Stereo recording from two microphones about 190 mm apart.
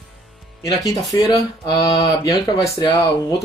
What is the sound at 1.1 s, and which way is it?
Speech, 20° left (ahead or behind).